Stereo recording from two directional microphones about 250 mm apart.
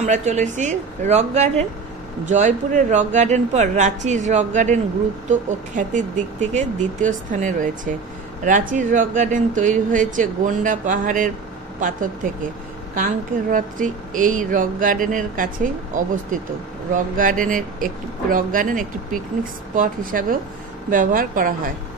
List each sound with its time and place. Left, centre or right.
0.0 s speech: right
12.9 s speech: right